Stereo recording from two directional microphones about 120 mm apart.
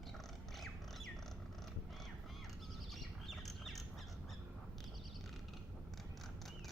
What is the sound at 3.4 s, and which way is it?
Squawk, centre (ahead or behind).